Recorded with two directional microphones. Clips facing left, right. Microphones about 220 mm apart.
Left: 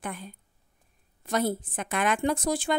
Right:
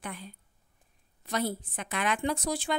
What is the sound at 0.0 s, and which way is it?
A woman's voice, 50° left (ahead or behind).